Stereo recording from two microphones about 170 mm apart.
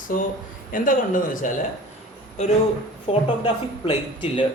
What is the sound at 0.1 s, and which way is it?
Speech, 50° left (ahead or behind).